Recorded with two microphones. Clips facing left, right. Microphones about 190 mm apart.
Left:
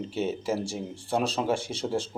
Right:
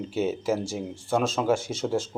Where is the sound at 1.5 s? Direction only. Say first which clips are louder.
Right 2 dB; 30° left (ahead or behind).